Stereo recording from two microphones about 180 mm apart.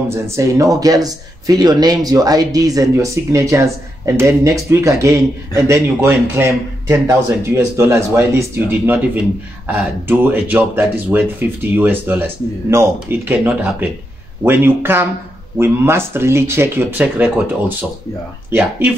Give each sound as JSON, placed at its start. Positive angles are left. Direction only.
{"t": 0.1, "sound": "speech", "side_deg": -15}